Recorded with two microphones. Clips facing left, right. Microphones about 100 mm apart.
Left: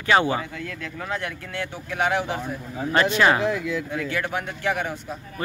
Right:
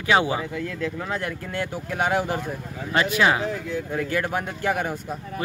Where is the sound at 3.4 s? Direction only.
80° left.